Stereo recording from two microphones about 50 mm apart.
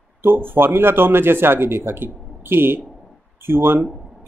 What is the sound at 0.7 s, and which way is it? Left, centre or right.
Speech, right.